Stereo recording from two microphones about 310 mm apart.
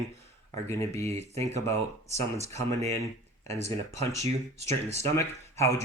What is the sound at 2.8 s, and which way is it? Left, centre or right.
Speech, centre.